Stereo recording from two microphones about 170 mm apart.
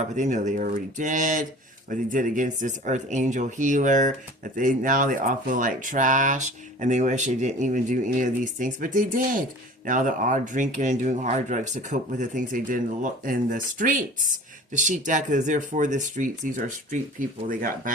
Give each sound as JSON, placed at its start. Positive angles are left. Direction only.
{"t": 0.0, "sound": "speech", "side_deg": -45}